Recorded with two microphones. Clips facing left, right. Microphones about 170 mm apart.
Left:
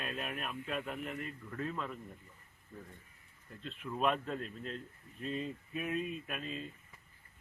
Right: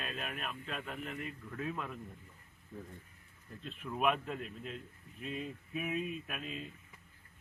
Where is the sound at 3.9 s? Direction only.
10° right (ahead or behind).